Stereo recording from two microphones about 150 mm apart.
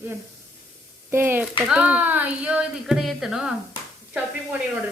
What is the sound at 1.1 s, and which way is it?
Speech, 15° right (ahead or behind).